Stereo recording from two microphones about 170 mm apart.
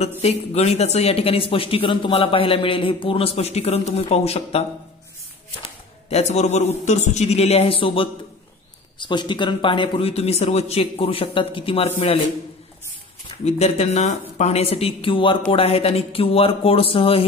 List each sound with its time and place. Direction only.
0.2 s speech: 40° left (ahead or behind)
6.0 s speech: 40° left (ahead or behind)
13.5 s speech: 40° left (ahead or behind)